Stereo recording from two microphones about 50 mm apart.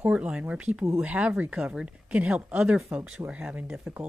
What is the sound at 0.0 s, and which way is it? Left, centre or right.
Speech, right.